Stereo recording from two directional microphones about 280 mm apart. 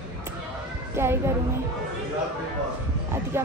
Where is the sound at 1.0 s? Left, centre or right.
Centre.